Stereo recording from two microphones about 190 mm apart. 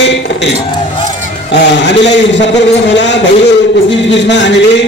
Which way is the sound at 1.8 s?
65° left (ahead or behind).